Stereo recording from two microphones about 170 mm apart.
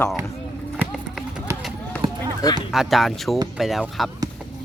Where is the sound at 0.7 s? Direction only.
5° right (ahead or behind).